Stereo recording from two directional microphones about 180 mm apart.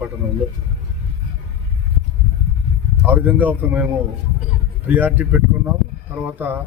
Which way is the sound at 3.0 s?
10° right (ahead or behind).